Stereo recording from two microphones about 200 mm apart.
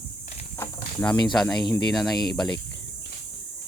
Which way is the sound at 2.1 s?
20° left (ahead or behind).